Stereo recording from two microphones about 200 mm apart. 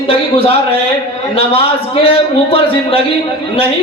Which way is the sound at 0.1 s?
30° left (ahead or behind).